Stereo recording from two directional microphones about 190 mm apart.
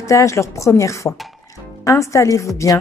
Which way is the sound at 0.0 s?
15° left (ahead or behind).